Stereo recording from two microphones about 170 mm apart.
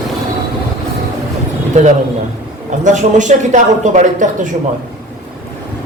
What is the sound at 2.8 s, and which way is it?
A man's voice, 45° right (ahead or behind).